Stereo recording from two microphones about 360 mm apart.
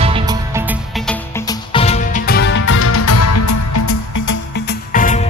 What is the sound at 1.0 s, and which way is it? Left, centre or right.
Music, centre.